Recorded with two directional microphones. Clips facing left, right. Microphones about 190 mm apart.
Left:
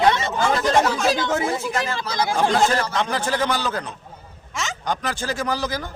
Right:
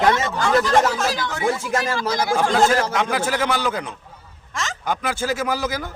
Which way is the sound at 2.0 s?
45° right (ahead or behind).